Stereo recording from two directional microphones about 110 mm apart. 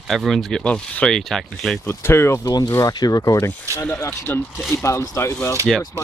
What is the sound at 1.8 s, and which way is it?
Speech, 20° left (ahead or behind).